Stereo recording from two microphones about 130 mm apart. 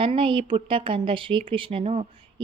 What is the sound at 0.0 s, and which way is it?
A woman's voice, 40° right (ahead or behind).